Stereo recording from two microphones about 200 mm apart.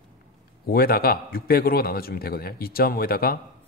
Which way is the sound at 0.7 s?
50° left (ahead or behind).